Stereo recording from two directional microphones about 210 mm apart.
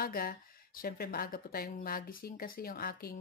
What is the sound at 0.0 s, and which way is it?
Speech, 45° left (ahead or behind).